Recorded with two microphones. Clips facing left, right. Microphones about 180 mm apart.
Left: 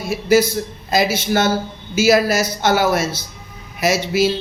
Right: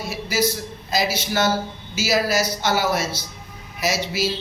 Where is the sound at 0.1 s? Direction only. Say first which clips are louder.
Left 9 dB; 50° left (ahead or behind).